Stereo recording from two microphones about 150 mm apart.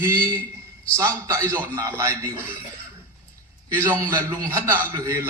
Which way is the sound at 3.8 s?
20° right (ahead or behind).